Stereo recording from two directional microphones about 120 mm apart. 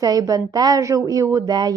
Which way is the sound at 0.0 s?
30° right (ahead or behind).